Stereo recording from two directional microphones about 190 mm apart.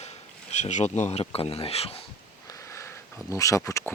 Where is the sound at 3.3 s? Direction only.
15° left (ahead or behind).